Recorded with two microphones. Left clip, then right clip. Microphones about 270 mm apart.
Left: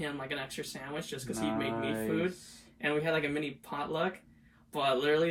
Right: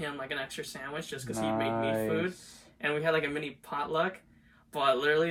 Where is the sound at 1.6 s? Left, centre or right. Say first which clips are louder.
Right 4 dB; right.